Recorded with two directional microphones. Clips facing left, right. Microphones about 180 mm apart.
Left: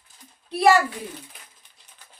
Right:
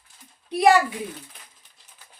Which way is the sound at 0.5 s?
15° right (ahead or behind).